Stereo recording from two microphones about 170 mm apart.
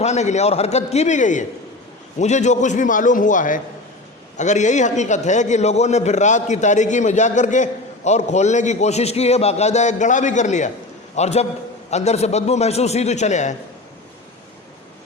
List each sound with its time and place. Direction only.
0.0 s a man's voice: 40° left (ahead or behind)